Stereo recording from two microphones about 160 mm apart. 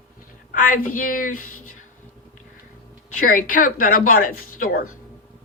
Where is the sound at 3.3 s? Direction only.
55° left (ahead or behind).